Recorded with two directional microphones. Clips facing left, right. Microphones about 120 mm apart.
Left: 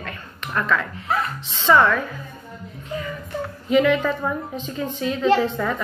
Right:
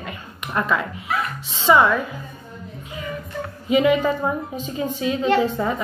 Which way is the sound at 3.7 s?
15° right (ahead or behind).